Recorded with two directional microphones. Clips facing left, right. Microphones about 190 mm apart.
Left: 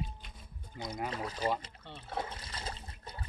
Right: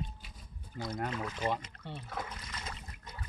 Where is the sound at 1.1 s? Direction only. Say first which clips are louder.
Even; 35° left (ahead or behind).